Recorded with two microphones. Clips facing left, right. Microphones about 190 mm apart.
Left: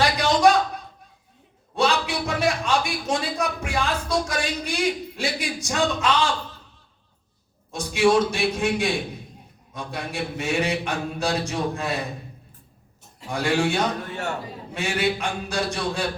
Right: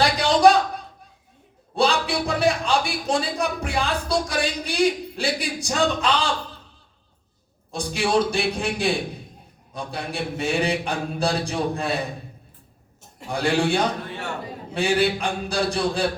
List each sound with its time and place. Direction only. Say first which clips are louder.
0.0 s a sound: right 2 dB; 30° right (ahead or behind)
1.7 s a man's voice: right 1 dB; 35° right (ahead or behind)
7.7 s a man's voice: left 3 dB; 35° right (ahead or behind)
13.3 s a man's voice: right 1 dB; 35° right (ahead or behind)